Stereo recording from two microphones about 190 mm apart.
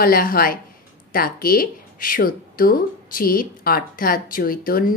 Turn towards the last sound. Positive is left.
turn(degrees=50)  # may be behind; listen again after turning